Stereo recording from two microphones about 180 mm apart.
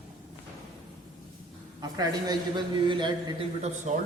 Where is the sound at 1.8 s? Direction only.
20° right (ahead or behind).